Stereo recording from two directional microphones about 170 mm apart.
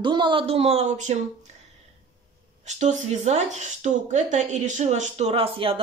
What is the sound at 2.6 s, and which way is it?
A woman's voice, 45° right (ahead or behind).